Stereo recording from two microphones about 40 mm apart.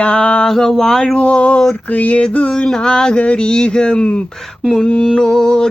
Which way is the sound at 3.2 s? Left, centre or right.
Left.